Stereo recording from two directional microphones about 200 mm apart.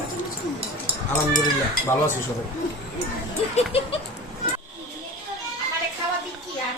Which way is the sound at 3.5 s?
30° left (ahead or behind).